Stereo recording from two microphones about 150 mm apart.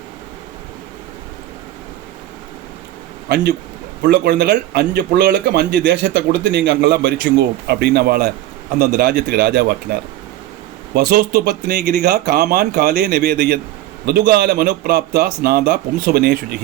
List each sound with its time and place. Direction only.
3.2 s speech: 90° right
8.8 s speech: 75° right (ahead or behind); by 16.6 s 90° right